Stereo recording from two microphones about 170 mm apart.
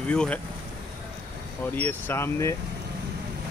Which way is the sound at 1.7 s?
10° left (ahead or behind).